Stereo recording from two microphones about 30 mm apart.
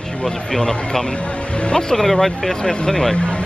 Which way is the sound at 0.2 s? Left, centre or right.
Left.